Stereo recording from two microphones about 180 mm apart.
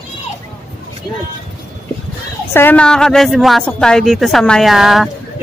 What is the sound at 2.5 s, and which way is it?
A woman's voice, 10° left (ahead or behind).